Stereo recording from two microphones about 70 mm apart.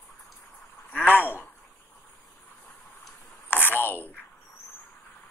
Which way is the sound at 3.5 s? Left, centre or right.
Left.